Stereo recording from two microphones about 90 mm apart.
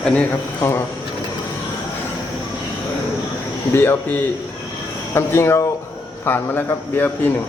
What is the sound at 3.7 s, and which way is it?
Speech, 25° left (ahead or behind).